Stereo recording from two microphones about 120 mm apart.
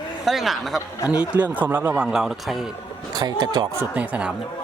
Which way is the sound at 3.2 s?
35° right (ahead or behind).